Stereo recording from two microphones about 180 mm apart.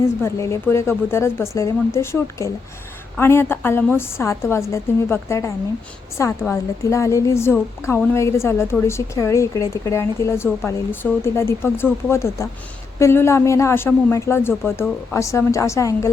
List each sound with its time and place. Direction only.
0.0 s a woman's voice: 15° left (ahead or behind)